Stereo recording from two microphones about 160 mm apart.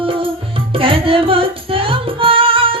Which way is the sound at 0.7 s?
35° right (ahead or behind).